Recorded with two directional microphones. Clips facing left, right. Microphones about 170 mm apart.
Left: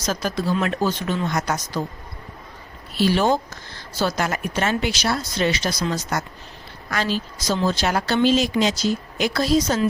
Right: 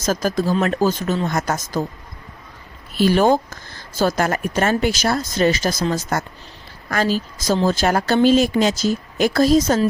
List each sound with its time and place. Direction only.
0.0 s a woman's voice: 45° right (ahead or behind)
2.9 s a woman's voice: 50° right (ahead or behind)